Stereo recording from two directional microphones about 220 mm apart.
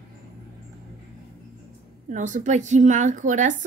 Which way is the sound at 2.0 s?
35° right (ahead or behind).